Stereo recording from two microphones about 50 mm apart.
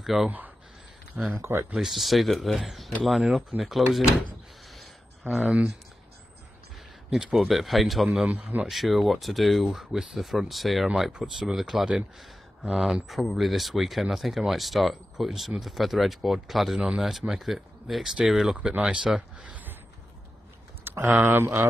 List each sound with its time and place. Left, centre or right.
0.0 s speech: centre
1.1 s speech: right
1.8 s speech: centre
5.2 s speech: right
7.1 s speech: centre
11.0 s speech: centre
18.5 s speech: right
19.0 s speech: centre
20.8 s speech: right